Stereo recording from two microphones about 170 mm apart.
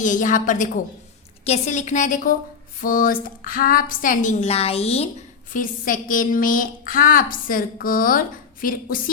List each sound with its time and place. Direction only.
0.0 s a woman's voice: 50° left (ahead or behind)
5.5 s a woman's voice: 50° left (ahead or behind)